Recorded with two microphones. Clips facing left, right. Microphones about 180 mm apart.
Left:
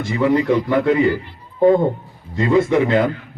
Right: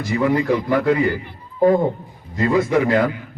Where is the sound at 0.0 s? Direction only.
25° left (ahead or behind).